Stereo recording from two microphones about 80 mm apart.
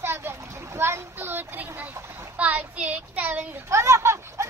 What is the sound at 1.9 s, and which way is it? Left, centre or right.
Splash, right.